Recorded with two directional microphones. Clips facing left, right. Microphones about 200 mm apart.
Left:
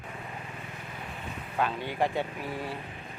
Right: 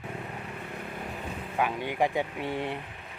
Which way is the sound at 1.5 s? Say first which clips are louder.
Right 1 dB; 15° right (ahead or behind).